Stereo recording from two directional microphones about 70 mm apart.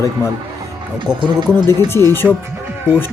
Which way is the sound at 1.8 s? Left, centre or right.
Left.